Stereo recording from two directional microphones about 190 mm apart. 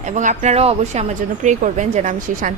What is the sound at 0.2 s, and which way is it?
A woman's voice, 40° right (ahead or behind).